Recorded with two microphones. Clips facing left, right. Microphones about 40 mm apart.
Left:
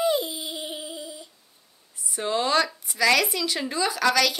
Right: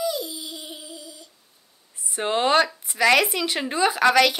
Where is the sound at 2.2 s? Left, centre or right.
Right.